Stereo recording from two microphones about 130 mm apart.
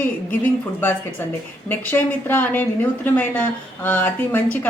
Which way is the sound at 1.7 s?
15° left (ahead or behind).